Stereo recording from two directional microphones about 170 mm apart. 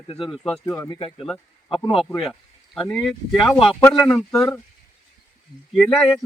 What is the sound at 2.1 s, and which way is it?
Speech, centre (ahead or behind).